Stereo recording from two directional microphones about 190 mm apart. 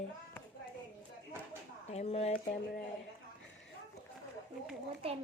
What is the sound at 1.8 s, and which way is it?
Speech, 35° left (ahead or behind).